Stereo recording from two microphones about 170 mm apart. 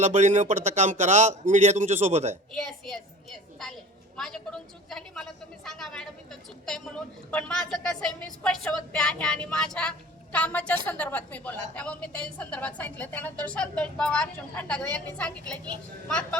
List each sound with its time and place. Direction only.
0.0 s speech: 45° right (ahead or behind)
2.5 s a woman's voice: centre (ahead or behind)
4.2 s a woman's voice: 5° left (ahead or behind)